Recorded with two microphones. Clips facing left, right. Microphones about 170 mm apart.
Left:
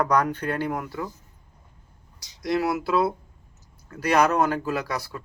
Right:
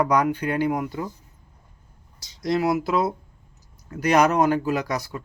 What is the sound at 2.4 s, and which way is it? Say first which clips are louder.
Speech: right 2 dB; 20° right (ahead or behind).